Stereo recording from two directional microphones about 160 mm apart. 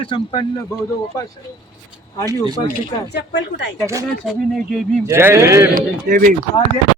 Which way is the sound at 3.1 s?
90° left.